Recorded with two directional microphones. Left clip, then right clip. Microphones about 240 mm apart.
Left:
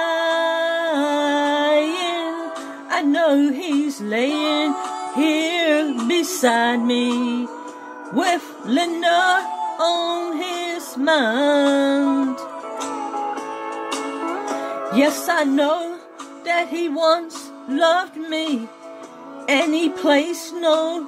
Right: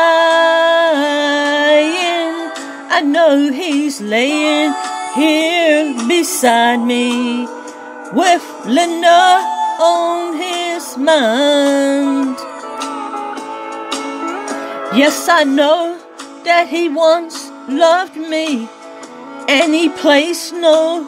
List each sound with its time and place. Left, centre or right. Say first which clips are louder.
0.0 s music: right 10 dB; centre
12.8 s music: right 3 dB; right
15.2 s music: right 8 dB; centre